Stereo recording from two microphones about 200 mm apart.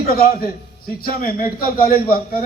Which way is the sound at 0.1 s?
45° left (ahead or behind).